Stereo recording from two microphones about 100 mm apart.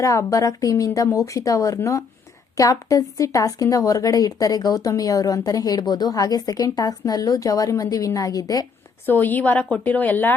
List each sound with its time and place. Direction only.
0.0 s a woman's voice: 30° left (ahead or behind)
9.0 s a woman's voice: 20° left (ahead or behind)